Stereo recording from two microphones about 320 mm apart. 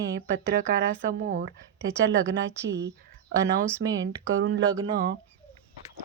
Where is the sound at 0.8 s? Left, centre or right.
Right.